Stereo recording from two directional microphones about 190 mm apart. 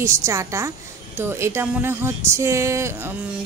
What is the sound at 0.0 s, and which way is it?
Speech, 15° right (ahead or behind).